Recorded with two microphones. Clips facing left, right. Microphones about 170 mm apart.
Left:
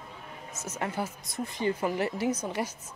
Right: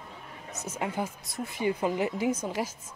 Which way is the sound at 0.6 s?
10° right (ahead or behind).